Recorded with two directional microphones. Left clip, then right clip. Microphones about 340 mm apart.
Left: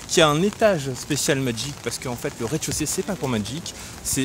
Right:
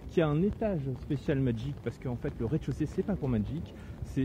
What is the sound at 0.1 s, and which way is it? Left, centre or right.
Speech, centre.